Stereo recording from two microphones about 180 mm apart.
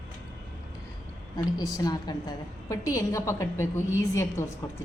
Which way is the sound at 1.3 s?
20° left (ahead or behind).